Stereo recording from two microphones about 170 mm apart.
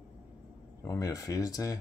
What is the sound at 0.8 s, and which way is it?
Speech, 20° left (ahead or behind).